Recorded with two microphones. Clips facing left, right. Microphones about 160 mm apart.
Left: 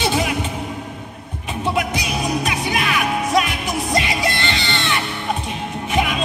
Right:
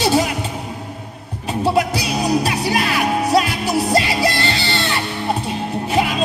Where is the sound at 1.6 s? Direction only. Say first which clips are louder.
Right 4 dB; 35° right (ahead or behind).